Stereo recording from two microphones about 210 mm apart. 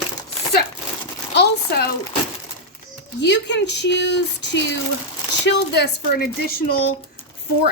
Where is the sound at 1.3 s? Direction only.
50° left (ahead or behind).